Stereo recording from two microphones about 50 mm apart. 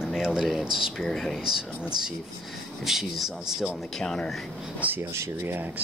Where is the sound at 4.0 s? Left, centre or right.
Centre.